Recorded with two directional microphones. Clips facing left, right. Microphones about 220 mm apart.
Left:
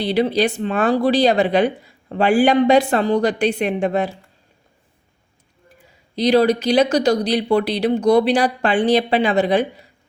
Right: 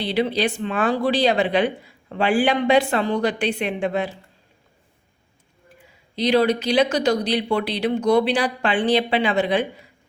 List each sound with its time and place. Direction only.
0.0 s speech: 40° left (ahead or behind)
6.1 s speech: 40° left (ahead or behind)